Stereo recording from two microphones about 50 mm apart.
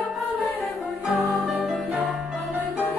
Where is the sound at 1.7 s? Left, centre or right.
Right.